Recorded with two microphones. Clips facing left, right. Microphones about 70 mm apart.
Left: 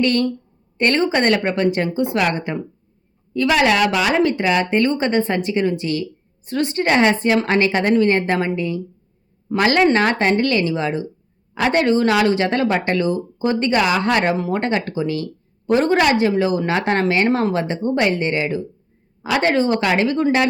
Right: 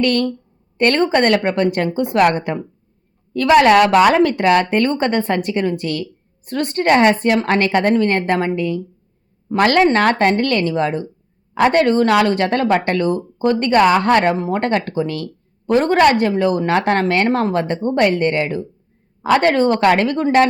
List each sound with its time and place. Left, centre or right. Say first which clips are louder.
0.0 s a woman's voice: right 1 dB; right